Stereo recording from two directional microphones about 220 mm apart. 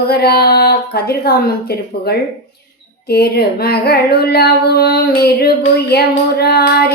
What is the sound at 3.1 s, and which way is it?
Child singing, 45° left (ahead or behind).